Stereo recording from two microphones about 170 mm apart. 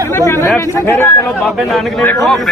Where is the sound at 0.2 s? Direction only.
15° left (ahead or behind).